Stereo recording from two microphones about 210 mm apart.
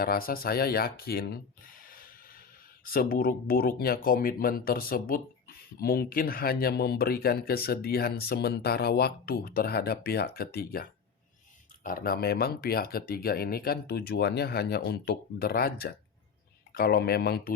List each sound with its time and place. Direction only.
0.0 s speech: 45° left (ahead or behind)